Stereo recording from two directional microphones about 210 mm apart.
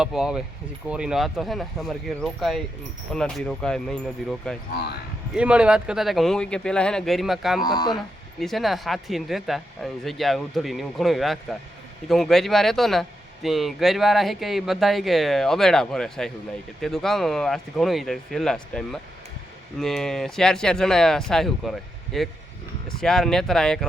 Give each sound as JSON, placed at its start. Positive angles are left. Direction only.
{"t": 0.0, "sound": "speech", "side_deg": -5}
{"t": 7.6, "sound": "speech", "side_deg": 20}
{"t": 8.4, "sound": "speech", "side_deg": 0}